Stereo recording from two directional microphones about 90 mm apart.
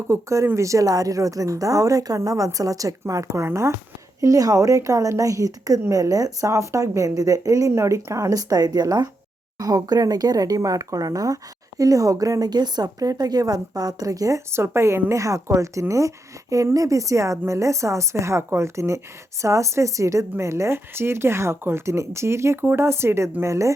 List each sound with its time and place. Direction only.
0.1 s a woman's voice: 30° right (ahead or behind)